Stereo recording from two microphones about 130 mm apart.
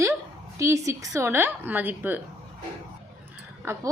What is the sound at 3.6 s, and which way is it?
Speech, 20° right (ahead or behind).